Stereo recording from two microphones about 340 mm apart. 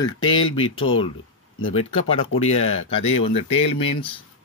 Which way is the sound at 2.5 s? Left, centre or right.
Left.